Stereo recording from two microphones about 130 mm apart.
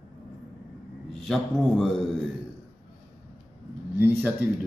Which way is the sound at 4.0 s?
15° right (ahead or behind).